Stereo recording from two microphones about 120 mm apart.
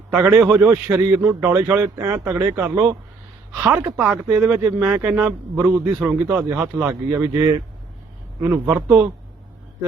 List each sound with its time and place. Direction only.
0.2 s a man's voice: 20° right (ahead or behind)